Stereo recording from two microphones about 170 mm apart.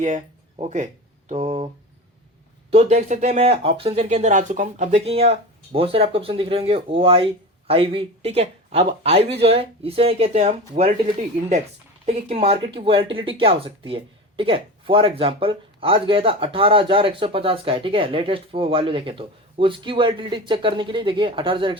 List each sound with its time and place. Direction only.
0.6 s speech: 40° right (ahead or behind)
12.0 s speech: 35° right (ahead or behind)